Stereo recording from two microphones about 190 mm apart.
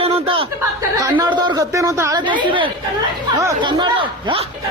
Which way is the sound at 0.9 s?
20° right (ahead or behind).